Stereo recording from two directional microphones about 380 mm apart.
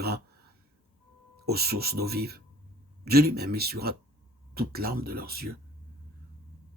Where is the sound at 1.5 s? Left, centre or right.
Right.